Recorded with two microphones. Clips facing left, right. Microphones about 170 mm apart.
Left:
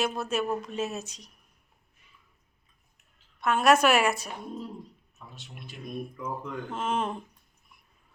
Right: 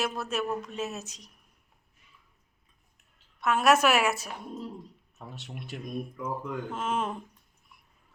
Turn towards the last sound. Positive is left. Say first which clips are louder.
# left 1 dB
turn(degrees=-5)  # may be behind; listen again after turning